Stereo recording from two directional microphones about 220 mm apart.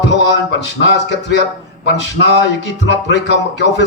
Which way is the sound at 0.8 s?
55° left (ahead or behind).